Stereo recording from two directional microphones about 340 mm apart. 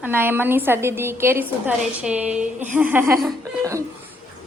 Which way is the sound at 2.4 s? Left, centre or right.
Right.